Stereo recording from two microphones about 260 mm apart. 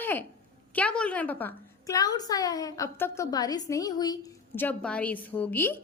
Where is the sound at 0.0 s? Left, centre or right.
Centre.